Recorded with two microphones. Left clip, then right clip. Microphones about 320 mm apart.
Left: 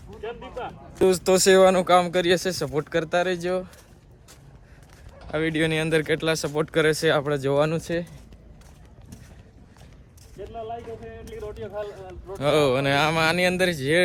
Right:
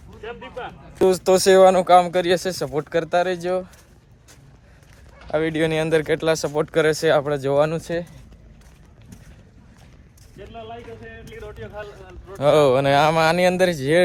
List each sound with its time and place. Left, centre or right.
0.2 s speech: left
0.9 s speech: centre
5.3 s speech: centre
10.5 s music: left
11.3 s a sound: left
11.9 s speech: centre